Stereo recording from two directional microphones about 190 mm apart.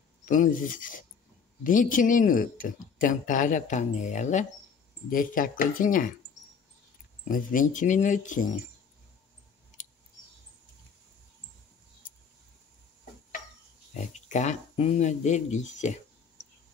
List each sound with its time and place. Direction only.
0.2 s speech: 45° left (ahead or behind)
7.2 s speech: 45° left (ahead or behind)
13.9 s speech: 40° left (ahead or behind)